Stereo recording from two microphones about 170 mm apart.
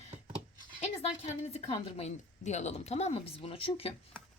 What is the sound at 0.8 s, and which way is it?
A woman's voice, 40° left (ahead or behind).